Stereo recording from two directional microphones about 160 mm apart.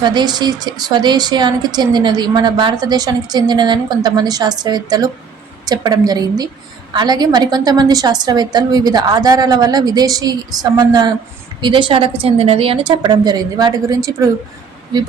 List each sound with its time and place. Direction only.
0.0 s a woman's voice: 25° right (ahead or behind)